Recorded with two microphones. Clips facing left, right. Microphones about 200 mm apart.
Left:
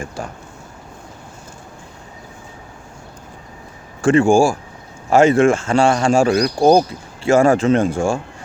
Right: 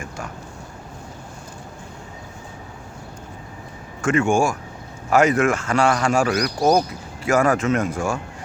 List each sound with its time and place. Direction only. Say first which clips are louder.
4.0 s speech: left 6 dB; 30° left (ahead or behind)